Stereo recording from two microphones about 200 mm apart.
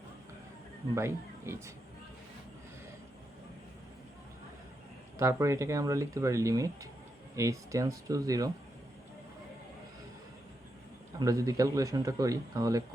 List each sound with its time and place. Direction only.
0.9 s speech: 15° right (ahead or behind)
5.1 s speech: 15° right (ahead or behind)
11.2 s speech: 15° right (ahead or behind)